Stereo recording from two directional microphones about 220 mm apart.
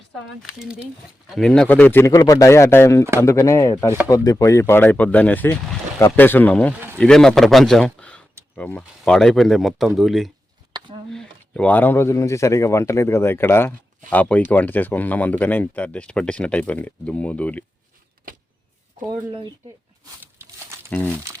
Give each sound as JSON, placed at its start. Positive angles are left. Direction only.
{"t": 0.6, "sound": "speech", "side_deg": -5}
{"t": 6.7, "sound": "a sound", "side_deg": -10}
{"t": 7.0, "sound": "speech", "side_deg": 5}
{"t": 10.7, "sound": "a sound", "side_deg": -20}
{"t": 11.1, "sound": "speech", "side_deg": 5}
{"t": 20.2, "sound": "crumpling", "side_deg": -10}
{"t": 21.3, "sound": "speech", "side_deg": -15}